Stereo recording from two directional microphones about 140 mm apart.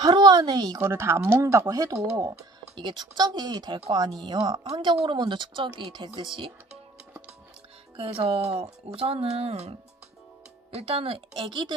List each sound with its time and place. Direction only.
0.0 s a woman's voice: 30° right (ahead or behind)
0.8 s speech: 15° right (ahead or behind); by 6.1 s 35° right (ahead or behind)
7.9 s speech: 45° right (ahead or behind)